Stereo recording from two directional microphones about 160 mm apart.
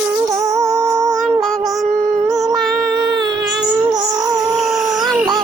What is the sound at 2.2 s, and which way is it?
Humming, 20° right (ahead or behind).